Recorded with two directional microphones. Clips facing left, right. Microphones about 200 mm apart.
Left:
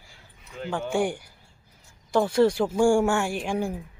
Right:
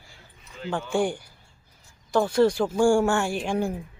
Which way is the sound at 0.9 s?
15° left (ahead or behind).